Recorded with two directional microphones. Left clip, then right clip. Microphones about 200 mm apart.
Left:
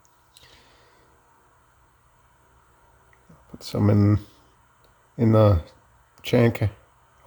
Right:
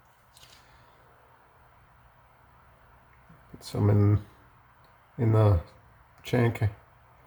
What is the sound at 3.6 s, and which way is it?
Speech, 40° left (ahead or behind).